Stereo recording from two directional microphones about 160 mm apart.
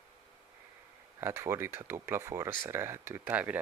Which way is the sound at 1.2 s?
15° right (ahead or behind).